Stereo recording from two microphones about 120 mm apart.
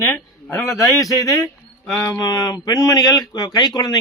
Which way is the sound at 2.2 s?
30° left (ahead or behind).